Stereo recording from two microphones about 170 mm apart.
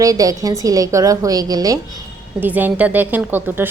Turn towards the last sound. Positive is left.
turn(degrees=-10)  # may be behind; listen again after turning